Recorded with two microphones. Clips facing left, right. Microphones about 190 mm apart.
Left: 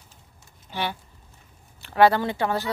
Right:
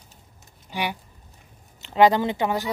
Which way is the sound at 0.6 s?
15° right (ahead or behind).